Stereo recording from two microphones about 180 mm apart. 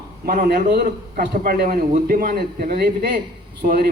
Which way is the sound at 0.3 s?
55° right (ahead or behind).